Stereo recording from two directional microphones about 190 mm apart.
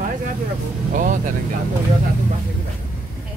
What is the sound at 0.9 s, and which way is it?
Speech, 45° right (ahead or behind).